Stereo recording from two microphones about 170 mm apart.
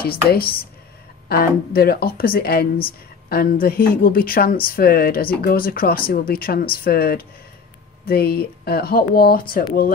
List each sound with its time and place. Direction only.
0.0 s speech: 65° left (ahead or behind)